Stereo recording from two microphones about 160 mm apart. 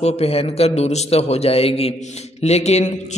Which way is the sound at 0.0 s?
40° left (ahead or behind).